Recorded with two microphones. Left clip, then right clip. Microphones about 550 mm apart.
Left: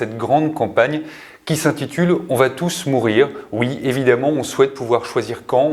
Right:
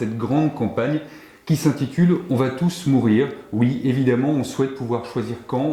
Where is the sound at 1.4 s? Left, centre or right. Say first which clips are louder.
Left 4 dB; left.